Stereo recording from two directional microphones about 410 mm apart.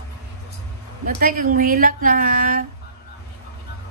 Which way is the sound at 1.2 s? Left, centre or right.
Centre.